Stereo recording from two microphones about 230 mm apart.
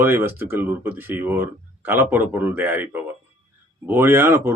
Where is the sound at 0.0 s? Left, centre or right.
Centre.